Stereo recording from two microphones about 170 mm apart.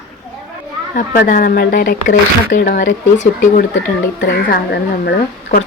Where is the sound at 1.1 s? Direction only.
55° left (ahead or behind).